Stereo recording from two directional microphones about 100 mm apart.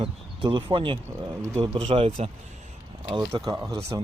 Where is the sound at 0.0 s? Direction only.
55° right (ahead or behind); by 2.3 s 90° right.